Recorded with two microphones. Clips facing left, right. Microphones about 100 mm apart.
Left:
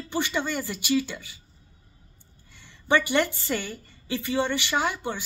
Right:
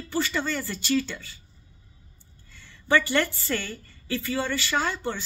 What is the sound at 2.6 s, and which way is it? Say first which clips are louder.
A woman's voice: even; 20° left (ahead or behind).